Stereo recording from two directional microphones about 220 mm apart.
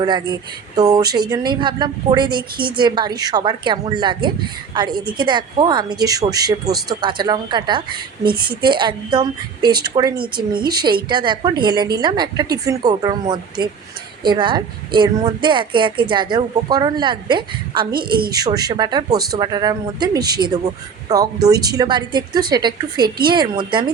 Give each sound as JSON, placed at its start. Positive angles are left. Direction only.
{"t": 0.0, "sound": "a woman's voice", "side_deg": -20}
{"t": 21.5, "sound": "speech", "side_deg": -45}
{"t": 21.8, "sound": "a woman's voice", "side_deg": -20}
{"t": 23.0, "sound": "speech", "side_deg": -45}
{"t": 23.3, "sound": "a woman's voice", "side_deg": -20}